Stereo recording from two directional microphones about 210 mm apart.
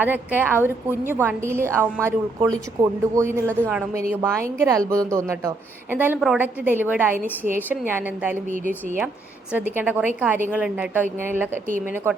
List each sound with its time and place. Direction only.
0.0 s a woman's voice: 10° right (ahead or behind)
9.5 s a woman's voice: 10° right (ahead or behind)